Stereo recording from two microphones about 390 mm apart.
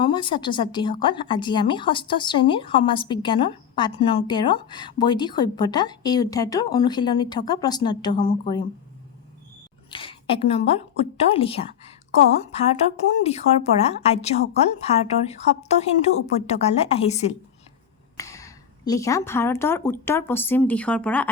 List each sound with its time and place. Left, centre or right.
0.0 s speech: centre
9.9 s a woman's voice: centre